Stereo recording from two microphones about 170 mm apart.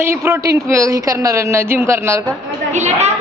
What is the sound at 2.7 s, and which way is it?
Speech, 40° right (ahead or behind).